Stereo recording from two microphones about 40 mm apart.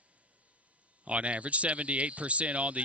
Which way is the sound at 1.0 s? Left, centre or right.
Right.